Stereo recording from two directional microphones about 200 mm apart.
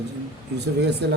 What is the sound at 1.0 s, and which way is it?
Speech, 60° right (ahead or behind).